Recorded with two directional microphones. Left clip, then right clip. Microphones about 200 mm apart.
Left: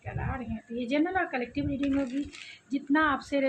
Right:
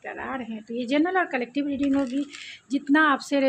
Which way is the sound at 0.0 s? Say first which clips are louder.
Right 5 dB; 55° right (ahead or behind).